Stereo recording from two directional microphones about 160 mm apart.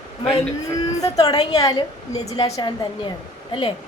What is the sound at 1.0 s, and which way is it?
A woman's voice, 20° left (ahead or behind).